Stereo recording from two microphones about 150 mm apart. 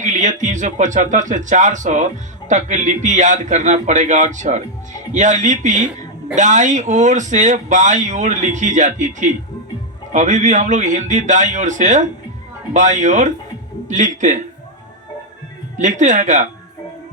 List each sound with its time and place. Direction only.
0.0 s speech: 55° right (ahead or behind)
15.8 s speech: 55° right (ahead or behind)